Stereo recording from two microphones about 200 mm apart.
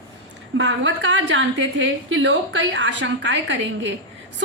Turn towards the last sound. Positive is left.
turn(degrees=-65)  # may be behind; listen again after turning